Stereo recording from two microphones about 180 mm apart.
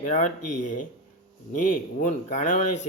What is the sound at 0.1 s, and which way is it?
Speech, 45° left (ahead or behind).